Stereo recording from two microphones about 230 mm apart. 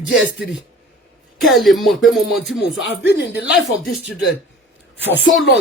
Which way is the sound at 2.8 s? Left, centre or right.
Left.